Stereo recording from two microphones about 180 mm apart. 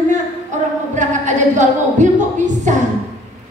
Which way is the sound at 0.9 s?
40° right (ahead or behind).